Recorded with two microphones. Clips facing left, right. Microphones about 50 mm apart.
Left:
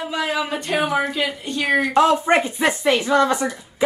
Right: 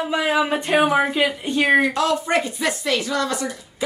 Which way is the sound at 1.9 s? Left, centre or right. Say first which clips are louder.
Left 4 dB; left.